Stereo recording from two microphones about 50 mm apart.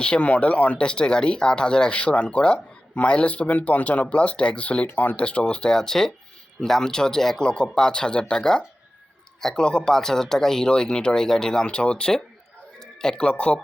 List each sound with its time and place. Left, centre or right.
0.0 s speech: left